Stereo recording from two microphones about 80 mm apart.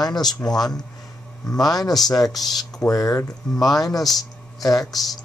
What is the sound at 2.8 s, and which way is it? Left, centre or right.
Speech, left.